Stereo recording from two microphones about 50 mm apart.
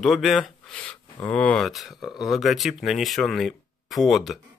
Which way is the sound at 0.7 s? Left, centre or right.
Left.